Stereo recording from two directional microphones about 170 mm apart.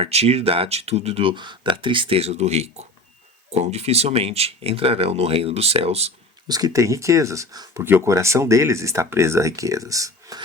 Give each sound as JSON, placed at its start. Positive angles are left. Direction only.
{"t": 0.0, "sound": "speech", "side_deg": -35}
{"t": 6.5, "sound": "speech", "side_deg": -20}